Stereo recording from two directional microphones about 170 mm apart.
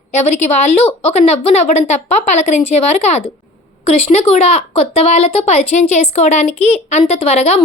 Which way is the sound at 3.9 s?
40° left (ahead or behind).